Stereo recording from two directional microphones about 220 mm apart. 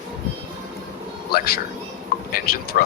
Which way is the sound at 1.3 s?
45° left (ahead or behind).